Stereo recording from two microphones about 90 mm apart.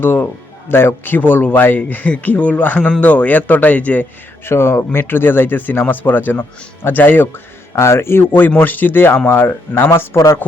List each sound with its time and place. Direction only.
0.0 s a man's voice: 25° left (ahead or behind)
4.4 s a man's voice: 30° left (ahead or behind)